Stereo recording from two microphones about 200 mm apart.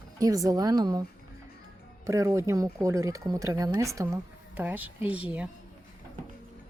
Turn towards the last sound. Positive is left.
turn(degrees=-5)  # may be behind; listen again after turning